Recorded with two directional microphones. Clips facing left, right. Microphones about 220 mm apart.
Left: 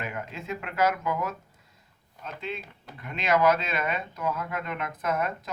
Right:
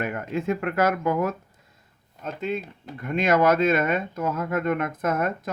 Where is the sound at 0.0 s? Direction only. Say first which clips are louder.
Right 9 dB; 55° right (ahead or behind).